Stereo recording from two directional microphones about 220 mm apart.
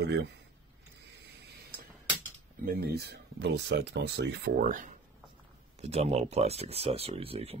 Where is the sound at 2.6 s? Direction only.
45° right (ahead or behind).